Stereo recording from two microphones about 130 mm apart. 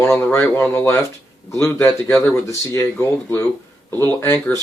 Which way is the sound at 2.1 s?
20° left (ahead or behind).